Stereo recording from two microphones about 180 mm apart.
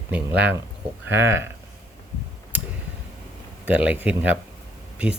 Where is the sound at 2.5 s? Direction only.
10° right (ahead or behind).